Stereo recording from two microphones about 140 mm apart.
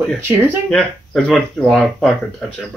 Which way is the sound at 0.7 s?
5° left (ahead or behind).